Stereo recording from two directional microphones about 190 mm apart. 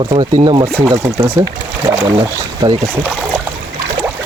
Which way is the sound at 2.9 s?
10° right (ahead or behind).